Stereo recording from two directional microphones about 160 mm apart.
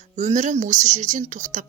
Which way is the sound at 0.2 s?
50° right (ahead or behind).